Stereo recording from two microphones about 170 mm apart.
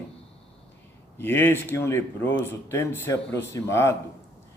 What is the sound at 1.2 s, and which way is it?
A man's voice, 10° left (ahead or behind).